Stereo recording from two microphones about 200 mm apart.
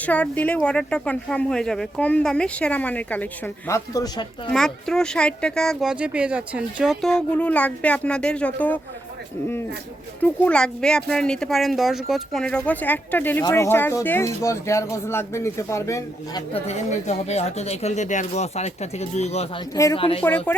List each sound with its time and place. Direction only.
0.0 s speech: 5° left (ahead or behind)
4.5 s speech: 5° left (ahead or behind)
10.2 s speech: 10° left (ahead or behind)
16.5 s speech: 30° left (ahead or behind)
19.7 s speech: 15° left (ahead or behind)
20.0 s speech: 30° left (ahead or behind)
20.2 s speech: 10° left (ahead or behind)